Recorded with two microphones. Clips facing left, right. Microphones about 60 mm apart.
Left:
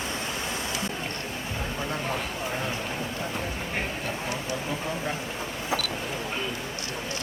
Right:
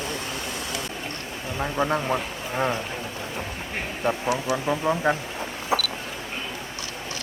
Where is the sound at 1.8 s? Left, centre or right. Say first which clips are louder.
Right 8 dB; right.